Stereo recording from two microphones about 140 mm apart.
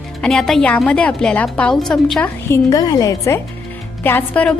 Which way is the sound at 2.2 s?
20° left (ahead or behind).